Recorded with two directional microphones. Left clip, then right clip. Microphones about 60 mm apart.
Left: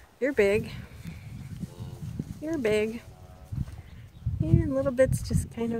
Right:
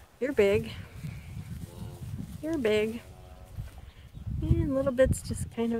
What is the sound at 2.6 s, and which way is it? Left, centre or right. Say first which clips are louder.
Speech: left 1 dB; left.